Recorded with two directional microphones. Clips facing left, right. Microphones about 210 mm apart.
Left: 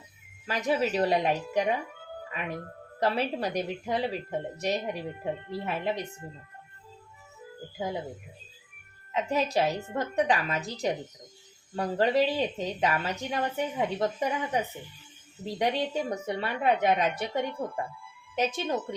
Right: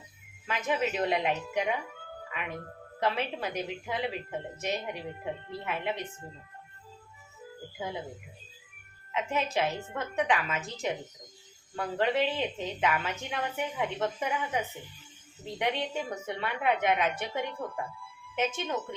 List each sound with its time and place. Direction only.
0.4 s a woman's voice: 35° left (ahead or behind)
9.1 s a woman's voice: 35° left (ahead or behind)